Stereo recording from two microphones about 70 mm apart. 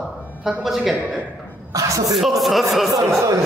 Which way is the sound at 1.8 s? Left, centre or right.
Right.